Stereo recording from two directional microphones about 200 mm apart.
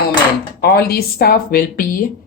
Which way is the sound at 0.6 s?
50° left (ahead or behind).